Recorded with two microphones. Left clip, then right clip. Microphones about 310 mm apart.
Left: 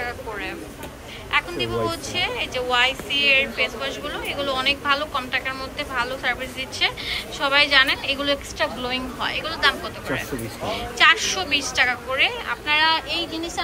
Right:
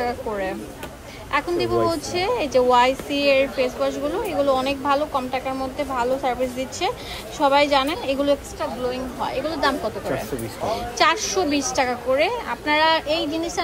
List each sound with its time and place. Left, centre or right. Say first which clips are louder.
1.3 s a woman's voice: right 2 dB; right